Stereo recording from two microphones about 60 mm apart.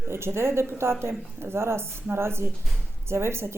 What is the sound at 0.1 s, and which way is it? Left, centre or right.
A woman's voice, right.